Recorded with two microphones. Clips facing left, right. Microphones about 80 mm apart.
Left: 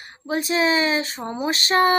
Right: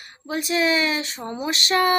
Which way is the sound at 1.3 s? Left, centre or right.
Left.